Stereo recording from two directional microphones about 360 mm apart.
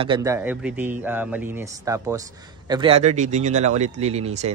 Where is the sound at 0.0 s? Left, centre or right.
Centre.